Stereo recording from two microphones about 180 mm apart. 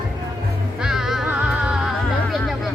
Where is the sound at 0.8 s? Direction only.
Centre (ahead or behind).